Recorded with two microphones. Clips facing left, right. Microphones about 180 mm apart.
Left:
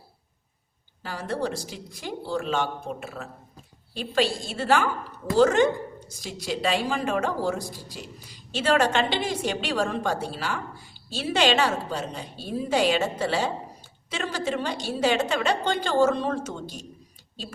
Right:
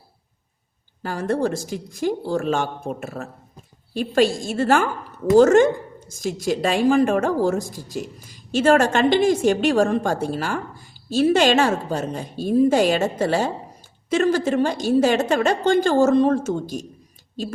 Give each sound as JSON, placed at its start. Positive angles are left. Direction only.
{"t": 1.0, "sound": "a woman's voice", "side_deg": -50}